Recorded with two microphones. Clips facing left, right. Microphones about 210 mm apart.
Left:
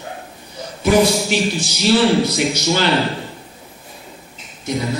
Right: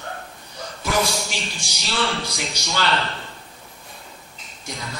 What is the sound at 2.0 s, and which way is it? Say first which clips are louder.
A man's voice: left 11 dB; 20° left (ahead or behind).